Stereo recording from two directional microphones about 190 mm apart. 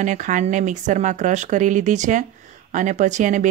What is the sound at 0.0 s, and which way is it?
Speech, 40° right (ahead or behind).